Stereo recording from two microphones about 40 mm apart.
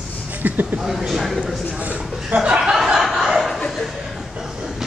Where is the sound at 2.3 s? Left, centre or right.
Right.